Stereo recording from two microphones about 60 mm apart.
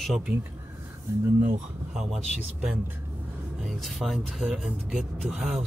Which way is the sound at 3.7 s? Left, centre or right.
Centre.